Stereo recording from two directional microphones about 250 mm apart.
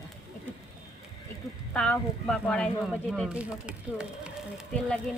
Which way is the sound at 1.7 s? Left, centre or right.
Centre.